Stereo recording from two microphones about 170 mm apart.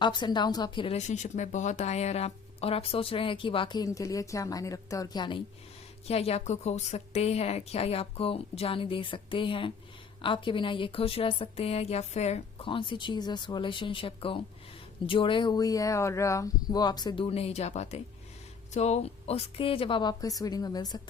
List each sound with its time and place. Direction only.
0.0 s a woman's voice: 25° left (ahead or behind)
0.9 s speech: 45° left (ahead or behind); by 5.4 s 25° left (ahead or behind)
6.1 s a woman's voice: 35° left (ahead or behind)